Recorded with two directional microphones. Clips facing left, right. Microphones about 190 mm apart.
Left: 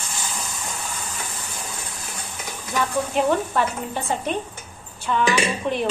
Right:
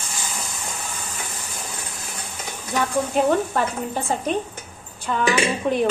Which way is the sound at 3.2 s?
45° right (ahead or behind).